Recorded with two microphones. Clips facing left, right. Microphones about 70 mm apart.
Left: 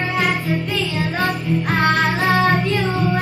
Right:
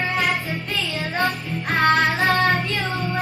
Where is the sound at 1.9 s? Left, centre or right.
Centre.